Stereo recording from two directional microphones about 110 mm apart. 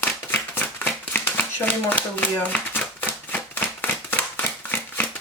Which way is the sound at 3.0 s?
15° left (ahead or behind).